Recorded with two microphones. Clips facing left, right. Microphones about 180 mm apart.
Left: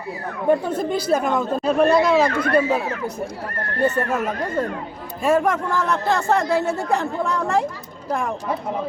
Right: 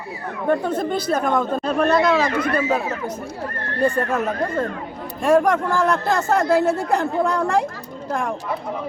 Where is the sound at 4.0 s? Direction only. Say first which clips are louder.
Right 1 dB; 10° left (ahead or behind).